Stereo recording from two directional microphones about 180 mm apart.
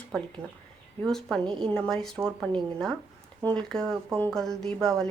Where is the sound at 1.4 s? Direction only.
25° right (ahead or behind).